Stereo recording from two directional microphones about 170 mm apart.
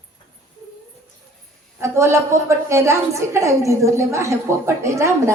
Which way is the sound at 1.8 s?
15° right (ahead or behind).